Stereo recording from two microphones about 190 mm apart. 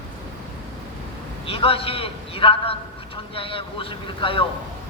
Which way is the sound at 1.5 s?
30° left (ahead or behind).